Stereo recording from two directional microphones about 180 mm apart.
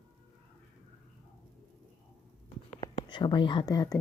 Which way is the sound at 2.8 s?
25° left (ahead or behind).